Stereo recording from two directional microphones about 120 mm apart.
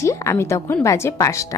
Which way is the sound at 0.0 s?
25° left (ahead or behind).